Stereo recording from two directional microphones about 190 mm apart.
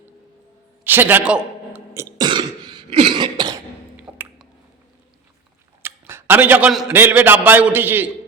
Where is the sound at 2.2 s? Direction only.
25° right (ahead or behind).